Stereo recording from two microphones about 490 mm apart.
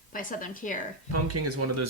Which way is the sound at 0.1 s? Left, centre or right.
Centre.